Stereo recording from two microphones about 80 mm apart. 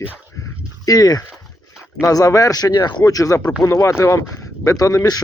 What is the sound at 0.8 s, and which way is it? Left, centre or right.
Speech, left.